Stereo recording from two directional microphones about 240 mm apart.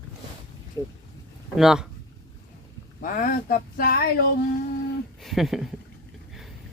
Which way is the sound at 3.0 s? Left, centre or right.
Left.